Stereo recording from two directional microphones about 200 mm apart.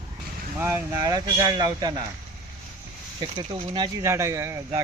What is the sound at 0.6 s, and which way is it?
Speech, 15° right (ahead or behind).